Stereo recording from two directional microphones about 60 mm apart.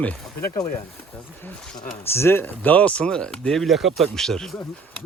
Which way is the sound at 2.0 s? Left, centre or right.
Left.